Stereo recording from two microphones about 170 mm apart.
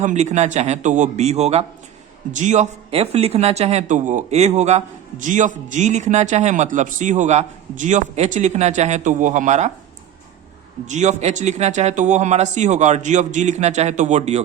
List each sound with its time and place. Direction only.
0.0 s speech: 45° right (ahead or behind)
10.8 s speech: 45° right (ahead or behind)